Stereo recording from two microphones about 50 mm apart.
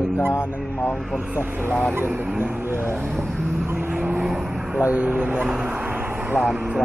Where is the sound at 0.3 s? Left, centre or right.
Left.